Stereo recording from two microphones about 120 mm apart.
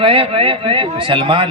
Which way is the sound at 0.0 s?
50° right (ahead or behind).